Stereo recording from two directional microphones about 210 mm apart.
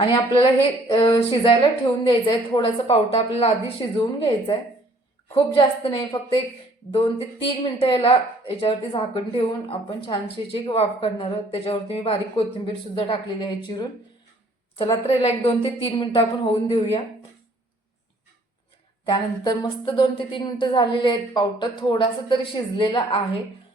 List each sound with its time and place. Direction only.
0.0 s speech: 25° left (ahead or behind)
15.0 s speech: 30° left (ahead or behind)
19.0 s speech: 20° left (ahead or behind)